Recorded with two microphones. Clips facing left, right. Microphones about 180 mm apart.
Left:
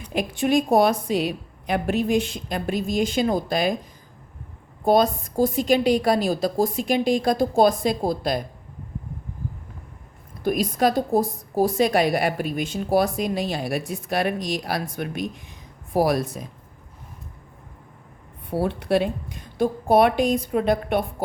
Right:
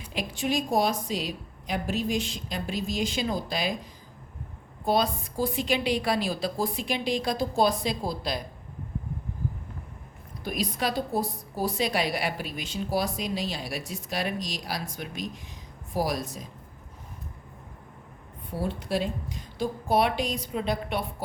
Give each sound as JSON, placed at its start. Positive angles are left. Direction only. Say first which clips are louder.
{"t": 0.1, "sound": "a woman's voice", "louder": "left 8 dB", "side_deg": 55}
{"t": 4.9, "sound": "a woman's voice", "louder": "left 7 dB", "side_deg": 45}
{"t": 10.4, "sound": "a woman's voice", "louder": "left 9 dB", "side_deg": 50}
{"t": 18.5, "sound": "a woman's voice", "louder": "left 7 dB", "side_deg": 65}